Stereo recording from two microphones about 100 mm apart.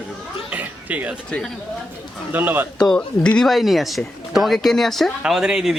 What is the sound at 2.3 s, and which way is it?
Speech, 20° right (ahead or behind).